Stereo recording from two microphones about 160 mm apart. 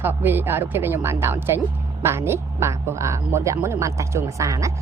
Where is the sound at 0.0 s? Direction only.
15° right (ahead or behind).